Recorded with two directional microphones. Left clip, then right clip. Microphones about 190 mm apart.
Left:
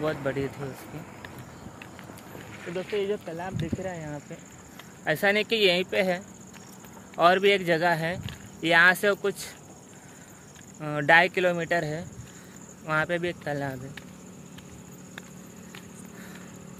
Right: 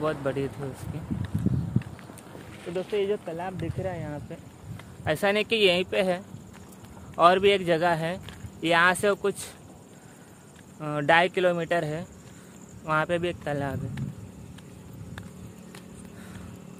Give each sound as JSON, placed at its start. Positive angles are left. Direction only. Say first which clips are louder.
{"t": 0.0, "sound": "speech", "louder": "right 1 dB", "side_deg": 0}
{"t": 0.5, "sound": "speech", "louder": "even", "side_deg": 30}
{"t": 2.7, "sound": "speech", "louder": "right 2 dB", "side_deg": 20}
{"t": 3.0, "sound": "speech", "louder": "right 2 dB", "side_deg": 0}
{"t": 10.8, "sound": "speech", "louder": "left 2 dB", "side_deg": 0}